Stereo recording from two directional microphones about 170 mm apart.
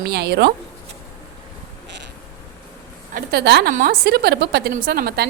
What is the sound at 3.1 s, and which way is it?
Speech, 70° right (ahead or behind).